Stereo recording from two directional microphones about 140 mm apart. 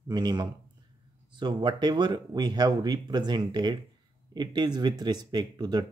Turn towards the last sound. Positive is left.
turn(degrees=-30)  # may be behind; listen again after turning